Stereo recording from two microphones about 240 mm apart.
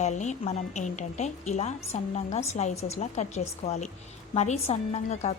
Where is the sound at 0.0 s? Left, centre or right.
Left.